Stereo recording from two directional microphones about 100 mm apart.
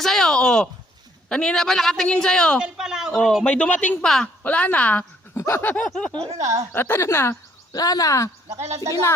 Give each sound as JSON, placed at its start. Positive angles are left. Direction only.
{"t": 0.0, "sound": "a woman's voice", "side_deg": 5}
{"t": 2.6, "sound": "speech", "side_deg": -10}
{"t": 3.4, "sound": "a woman's voice", "side_deg": 15}
{"t": 5.3, "sound": "snicker", "side_deg": 25}
{"t": 5.8, "sound": "speech", "side_deg": 5}
{"t": 6.3, "sound": "speech", "side_deg": -35}
{"t": 6.7, "sound": "speech", "side_deg": 20}
{"t": 7.7, "sound": "speech", "side_deg": 40}
{"t": 8.4, "sound": "a woman's voice", "side_deg": -30}